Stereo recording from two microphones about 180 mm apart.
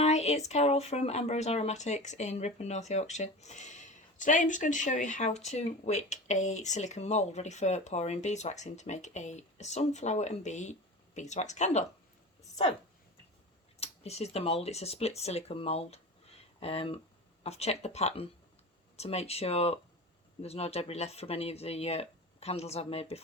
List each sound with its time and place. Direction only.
0.0 s speech: 35° left (ahead or behind)
13.7 s speech: 35° left (ahead or behind)